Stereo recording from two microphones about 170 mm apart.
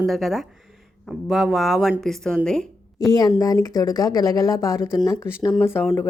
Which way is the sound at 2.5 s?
5° left (ahead or behind).